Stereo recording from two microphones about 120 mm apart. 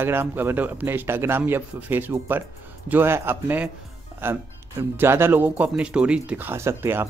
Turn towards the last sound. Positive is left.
turn(degrees=-20)  # may be behind; listen again after turning